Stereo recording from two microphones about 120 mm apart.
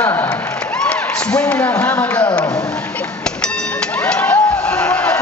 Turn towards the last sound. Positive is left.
turn(degrees=10)  # may be behind; listen again after turning